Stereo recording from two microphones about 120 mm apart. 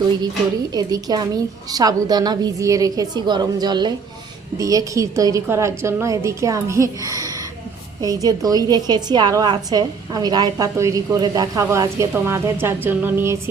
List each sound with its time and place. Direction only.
0.7 s a woman's voice: 30° right (ahead or behind); by 13.3 s 15° right (ahead or behind)